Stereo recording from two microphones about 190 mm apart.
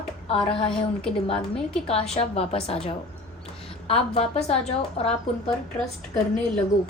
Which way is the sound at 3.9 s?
30° left (ahead or behind).